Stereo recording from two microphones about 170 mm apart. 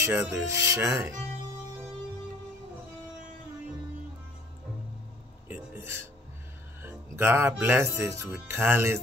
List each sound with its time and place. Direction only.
0.0 s speech: 15° right (ahead or behind)
5.5 s a sound: 15° right (ahead or behind)
6.8 s speech: 15° right (ahead or behind)